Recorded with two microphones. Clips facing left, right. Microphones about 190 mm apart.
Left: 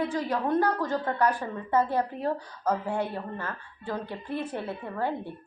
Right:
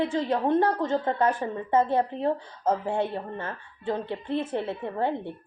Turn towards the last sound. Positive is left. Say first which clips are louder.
# right 3 dB
turn(degrees=-25)  # may be behind; listen again after turning